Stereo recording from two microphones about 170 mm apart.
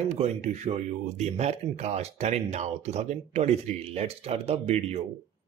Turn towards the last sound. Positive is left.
turn(degrees=-40)  # may be behind; listen again after turning